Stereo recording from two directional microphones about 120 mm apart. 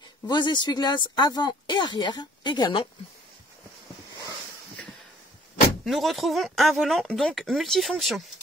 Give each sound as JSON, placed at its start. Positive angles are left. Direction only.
{"t": 0.3, "sound": "speech", "side_deg": 40}
{"t": 5.9, "sound": "speech", "side_deg": 0}